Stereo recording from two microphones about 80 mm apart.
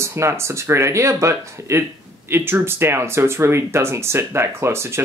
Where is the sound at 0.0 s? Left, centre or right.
Right.